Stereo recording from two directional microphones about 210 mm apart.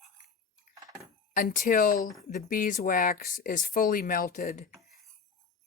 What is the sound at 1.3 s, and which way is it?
Speech, 40° left (ahead or behind).